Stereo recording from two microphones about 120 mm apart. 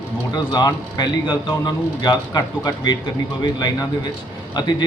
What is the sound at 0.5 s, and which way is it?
Speech, 35° left (ahead or behind).